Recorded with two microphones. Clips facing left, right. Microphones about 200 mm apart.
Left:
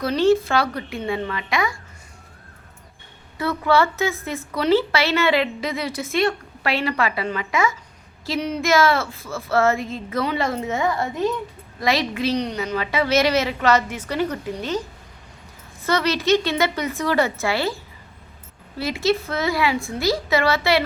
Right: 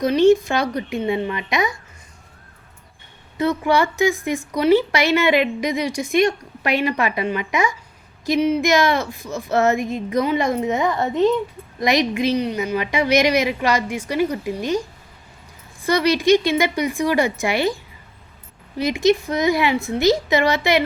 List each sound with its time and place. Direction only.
0.0 s a woman's voice: 15° right (ahead or behind)
3.3 s a woman's voice: 20° right (ahead or behind)
18.8 s a woman's voice: 15° right (ahead or behind)